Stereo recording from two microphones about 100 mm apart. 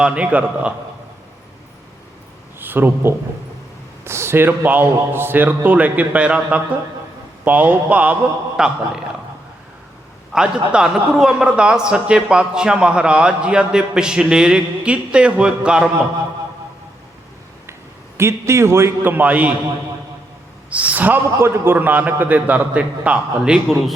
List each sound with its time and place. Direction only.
0.0 s a man's voice: 10° right (ahead or behind)
2.6 s a man's voice: 20° right (ahead or behind)
10.3 s a man's voice: 10° right (ahead or behind)
18.2 s a man's voice: 30° right (ahead or behind)
20.7 s a man's voice: 15° right (ahead or behind)